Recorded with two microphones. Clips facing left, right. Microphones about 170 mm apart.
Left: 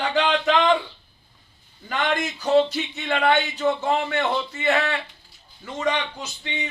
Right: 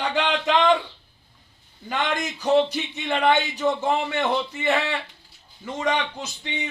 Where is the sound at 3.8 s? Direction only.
15° right (ahead or behind).